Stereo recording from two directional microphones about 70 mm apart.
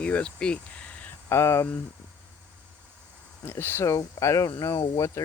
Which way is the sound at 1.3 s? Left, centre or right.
Left.